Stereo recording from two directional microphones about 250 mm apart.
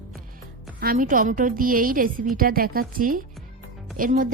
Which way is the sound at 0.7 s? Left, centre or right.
Right.